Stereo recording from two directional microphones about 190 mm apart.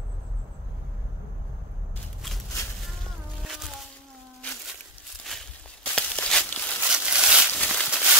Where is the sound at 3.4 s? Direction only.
Centre (ahead or behind).